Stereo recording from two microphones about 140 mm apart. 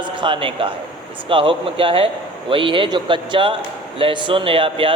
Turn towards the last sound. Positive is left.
turn(degrees=-40)  # may be behind; listen again after turning